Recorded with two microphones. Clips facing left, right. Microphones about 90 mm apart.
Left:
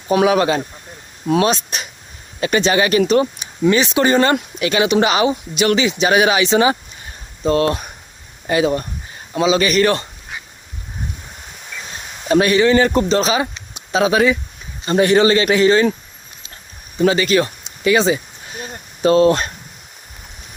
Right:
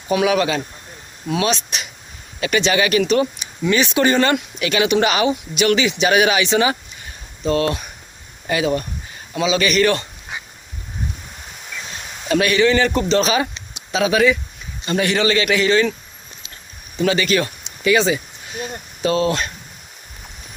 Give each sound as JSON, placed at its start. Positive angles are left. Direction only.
{"t": 0.1, "sound": "a man's voice", "side_deg": 35}
{"t": 12.3, "sound": "a man's voice", "side_deg": 30}
{"t": 17.0, "sound": "speech", "side_deg": 30}